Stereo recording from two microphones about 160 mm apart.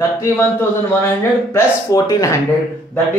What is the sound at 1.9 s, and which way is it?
Speech, 20° left (ahead or behind).